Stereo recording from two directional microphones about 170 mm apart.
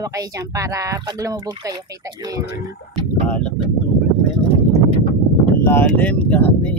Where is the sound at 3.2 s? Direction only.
5° left (ahead or behind).